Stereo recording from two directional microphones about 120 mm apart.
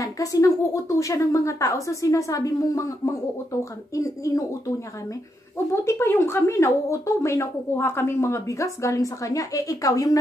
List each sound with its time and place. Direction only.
0.0 s speech: 30° left (ahead or behind)
3.9 s speech: 25° left (ahead or behind)